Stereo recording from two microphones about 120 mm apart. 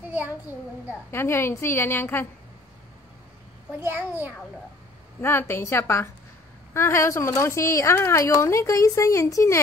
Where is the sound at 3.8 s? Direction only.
20° right (ahead or behind).